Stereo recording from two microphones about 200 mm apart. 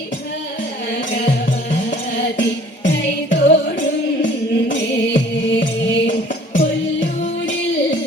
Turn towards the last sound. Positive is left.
turn(degrees=65)  # may be behind; listen again after turning